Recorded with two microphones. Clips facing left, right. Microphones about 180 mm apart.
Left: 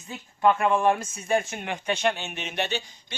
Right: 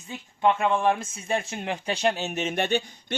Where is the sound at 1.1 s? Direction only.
30° right (ahead or behind); by 3.2 s 55° right (ahead or behind).